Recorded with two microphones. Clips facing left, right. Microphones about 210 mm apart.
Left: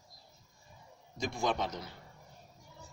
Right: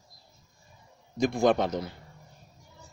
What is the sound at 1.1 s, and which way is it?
Speech, 60° right (ahead or behind).